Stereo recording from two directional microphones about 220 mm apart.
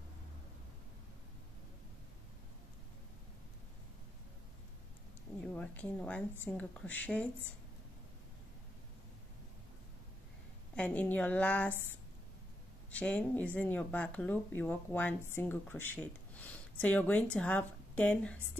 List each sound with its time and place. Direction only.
5.4 s a sound: 5° left (ahead or behind)
6.4 s speech: 5° left (ahead or behind)
10.8 s speech: 5° left (ahead or behind)
12.9 s speech: 5° left (ahead or behind)